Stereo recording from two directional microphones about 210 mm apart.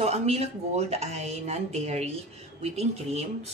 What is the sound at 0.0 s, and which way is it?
Speech, 30° right (ahead or behind).